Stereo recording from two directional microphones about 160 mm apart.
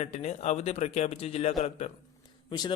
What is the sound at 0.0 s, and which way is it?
A man's voice, 45° left (ahead or behind).